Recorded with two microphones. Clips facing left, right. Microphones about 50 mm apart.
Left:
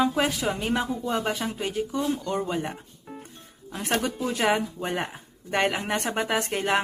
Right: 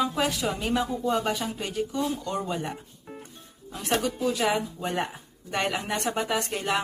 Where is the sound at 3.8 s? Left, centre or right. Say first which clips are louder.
Even; left.